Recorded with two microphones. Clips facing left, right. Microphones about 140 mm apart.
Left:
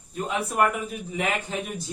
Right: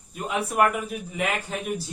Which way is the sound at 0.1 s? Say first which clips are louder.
Even; 5° right (ahead or behind).